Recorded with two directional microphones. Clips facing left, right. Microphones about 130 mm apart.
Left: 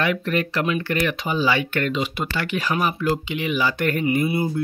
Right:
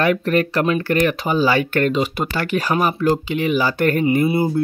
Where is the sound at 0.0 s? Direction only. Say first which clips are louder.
Right 5 dB; 45° right (ahead or behind).